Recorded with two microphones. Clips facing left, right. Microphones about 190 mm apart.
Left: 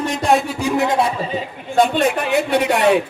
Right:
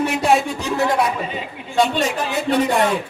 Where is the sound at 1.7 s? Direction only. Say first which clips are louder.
Left 3 dB; 55° left (ahead or behind).